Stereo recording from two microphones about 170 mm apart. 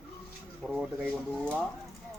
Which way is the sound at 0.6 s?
5° right (ahead or behind).